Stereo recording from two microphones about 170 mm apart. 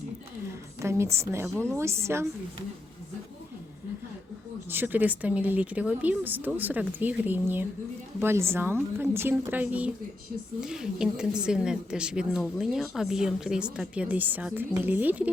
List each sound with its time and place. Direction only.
0.8 s a woman's voice: 15° right (ahead or behind)
4.7 s speech: 10° right (ahead or behind)